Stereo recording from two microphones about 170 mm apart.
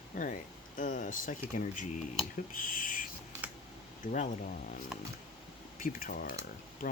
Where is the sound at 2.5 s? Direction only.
55° left (ahead or behind).